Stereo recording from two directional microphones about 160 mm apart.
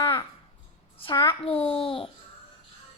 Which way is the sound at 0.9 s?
30° left (ahead or behind).